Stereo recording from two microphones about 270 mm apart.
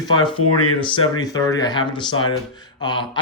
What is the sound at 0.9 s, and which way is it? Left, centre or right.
Speech, centre.